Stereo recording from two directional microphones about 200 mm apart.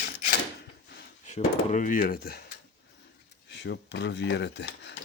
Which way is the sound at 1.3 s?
35° left (ahead or behind).